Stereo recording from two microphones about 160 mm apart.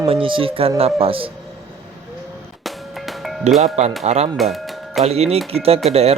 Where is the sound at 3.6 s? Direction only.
45° right (ahead or behind).